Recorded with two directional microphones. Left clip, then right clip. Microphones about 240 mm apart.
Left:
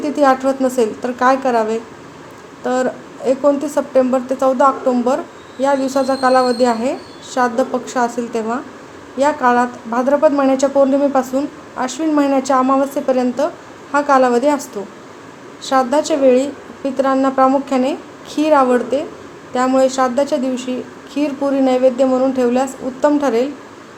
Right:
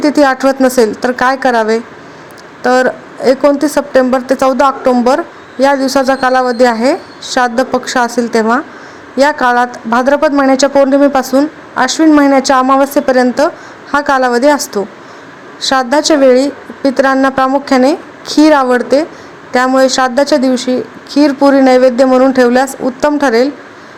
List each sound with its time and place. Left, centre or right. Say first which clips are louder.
0.0 s a woman's voice: right 5 dB; right